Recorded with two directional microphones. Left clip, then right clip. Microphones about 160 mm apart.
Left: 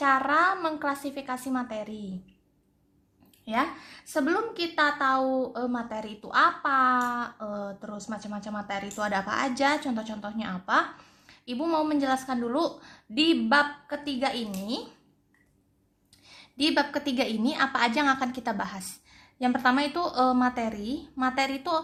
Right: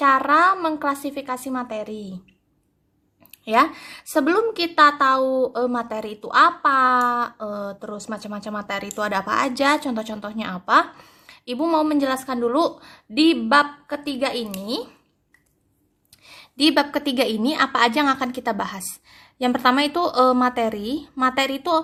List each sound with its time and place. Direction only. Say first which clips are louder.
0.0 s a woman's voice: right 7 dB; 25° right (ahead or behind)
3.4 s a woman's voice: right 10 dB; 40° right (ahead or behind)
16.2 s a woman's voice: right 8 dB; 35° right (ahead or behind)